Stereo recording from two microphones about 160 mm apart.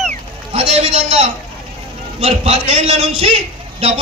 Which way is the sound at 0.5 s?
35° right (ahead or behind).